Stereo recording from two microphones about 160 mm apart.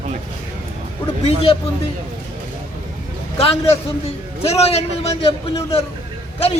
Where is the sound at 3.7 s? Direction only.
40° left (ahead or behind).